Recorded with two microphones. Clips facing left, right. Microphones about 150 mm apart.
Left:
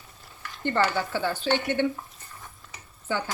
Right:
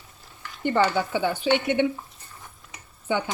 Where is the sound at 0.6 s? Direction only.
15° right (ahead or behind).